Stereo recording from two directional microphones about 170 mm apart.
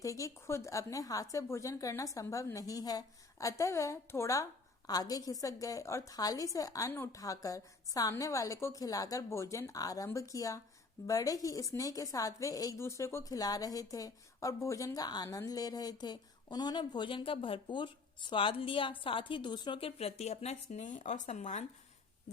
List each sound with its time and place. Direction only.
0.0 s a woman's voice: 20° left (ahead or behind); by 21.7 s 45° left (ahead or behind)